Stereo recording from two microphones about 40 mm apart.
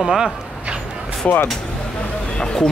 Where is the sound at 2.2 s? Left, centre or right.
Centre.